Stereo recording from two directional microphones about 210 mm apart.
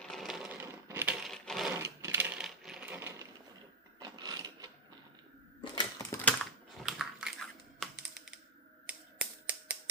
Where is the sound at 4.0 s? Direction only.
20° right (ahead or behind).